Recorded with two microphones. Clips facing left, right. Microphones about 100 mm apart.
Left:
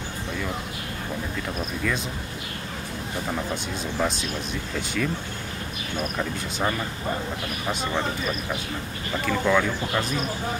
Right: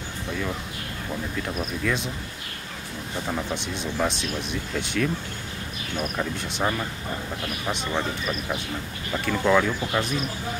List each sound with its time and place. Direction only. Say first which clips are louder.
3.3 s speech: right 1 dB; centre (ahead or behind)
9.2 s speech: right 1 dB; 5° right (ahead or behind)